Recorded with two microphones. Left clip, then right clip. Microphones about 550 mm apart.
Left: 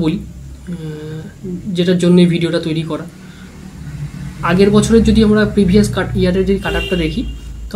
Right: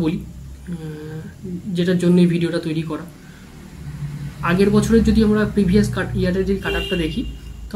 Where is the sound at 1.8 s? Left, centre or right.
Right.